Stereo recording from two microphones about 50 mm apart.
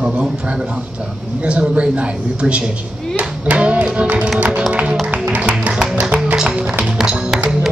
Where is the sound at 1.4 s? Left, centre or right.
Right.